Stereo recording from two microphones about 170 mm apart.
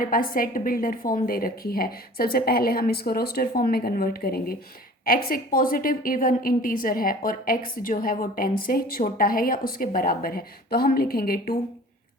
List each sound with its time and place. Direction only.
0.0 s a woman's voice: 55° left (ahead or behind)